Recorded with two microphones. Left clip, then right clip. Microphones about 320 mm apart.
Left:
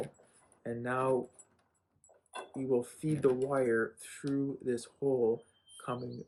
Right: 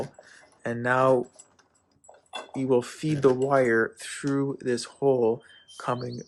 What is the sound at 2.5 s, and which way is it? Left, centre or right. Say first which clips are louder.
Speech: right 8 dB; centre.